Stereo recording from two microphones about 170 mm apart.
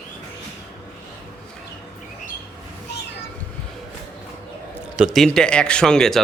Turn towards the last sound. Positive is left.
turn(degrees=5)  # may be behind; listen again after turning